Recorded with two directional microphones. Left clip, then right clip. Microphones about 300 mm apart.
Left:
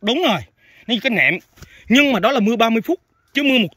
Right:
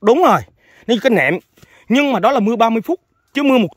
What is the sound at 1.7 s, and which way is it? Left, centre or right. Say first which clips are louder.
Speech: even; centre.